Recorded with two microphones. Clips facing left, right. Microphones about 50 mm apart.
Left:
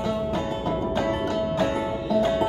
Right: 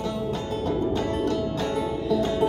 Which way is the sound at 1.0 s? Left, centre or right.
Left.